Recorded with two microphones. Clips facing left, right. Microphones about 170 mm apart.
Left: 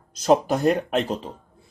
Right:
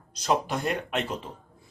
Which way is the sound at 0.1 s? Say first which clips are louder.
Left 7 dB; 45° left (ahead or behind).